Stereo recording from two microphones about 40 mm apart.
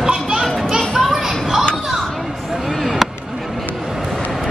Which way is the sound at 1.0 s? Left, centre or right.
Centre.